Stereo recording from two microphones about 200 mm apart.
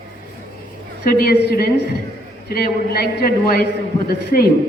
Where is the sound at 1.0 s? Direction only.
50° left (ahead or behind).